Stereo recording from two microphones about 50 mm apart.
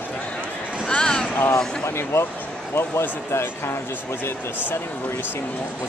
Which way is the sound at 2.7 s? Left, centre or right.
Left.